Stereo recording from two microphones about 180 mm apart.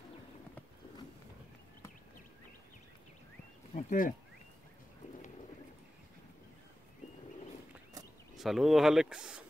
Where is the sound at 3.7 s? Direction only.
50° left (ahead or behind).